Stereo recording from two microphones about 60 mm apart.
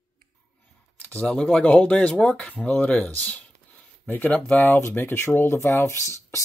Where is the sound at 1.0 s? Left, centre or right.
Left.